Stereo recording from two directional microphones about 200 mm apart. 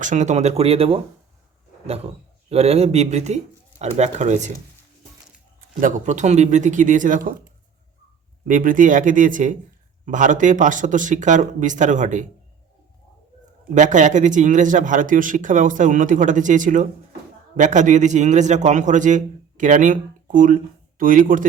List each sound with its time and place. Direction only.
0.0 s speech: 35° right (ahead or behind)
2.5 s speech: 30° right (ahead or behind)
5.5 s speech: 40° right (ahead or behind)
8.4 s speech: 40° right (ahead or behind)
13.7 s speech: 40° right (ahead or behind)